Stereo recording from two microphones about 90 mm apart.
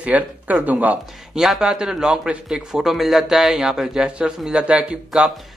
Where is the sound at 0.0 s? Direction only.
15° right (ahead or behind).